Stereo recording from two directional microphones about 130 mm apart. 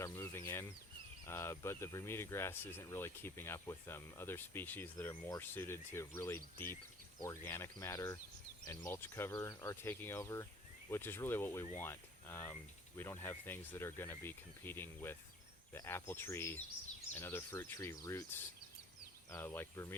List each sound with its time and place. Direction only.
0.0 s a sound: 20° left (ahead or behind)
1.2 s speech: 20° left (ahead or behind)
19.3 s speech: 20° left (ahead or behind)